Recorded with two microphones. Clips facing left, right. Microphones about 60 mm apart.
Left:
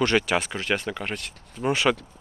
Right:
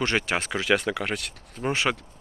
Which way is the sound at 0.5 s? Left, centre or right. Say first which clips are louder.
Right 3 dB; right.